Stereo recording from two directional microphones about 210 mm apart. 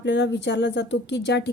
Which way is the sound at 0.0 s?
55° left (ahead or behind).